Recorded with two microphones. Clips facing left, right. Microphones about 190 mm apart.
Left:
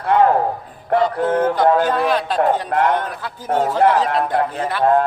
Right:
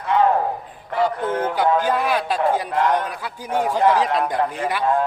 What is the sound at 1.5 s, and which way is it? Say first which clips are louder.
Speech: left 3 dB; 10° right (ahead or behind).